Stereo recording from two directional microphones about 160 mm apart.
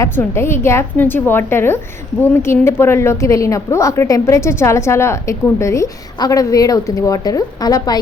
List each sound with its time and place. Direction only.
0.0 s a woman's voice: 15° left (ahead or behind)